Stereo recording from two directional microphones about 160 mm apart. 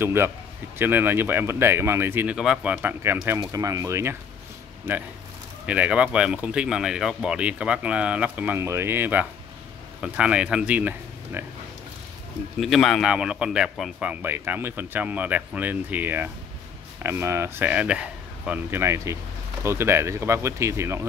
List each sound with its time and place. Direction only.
0.0 s speech: 15° right (ahead or behind)
5.7 s speech: 10° right (ahead or behind)
12.5 s speech: centre (ahead or behind)
14.2 s speech: 15° right (ahead or behind)